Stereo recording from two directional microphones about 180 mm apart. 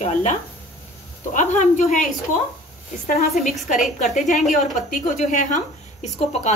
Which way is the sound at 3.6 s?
45° left (ahead or behind).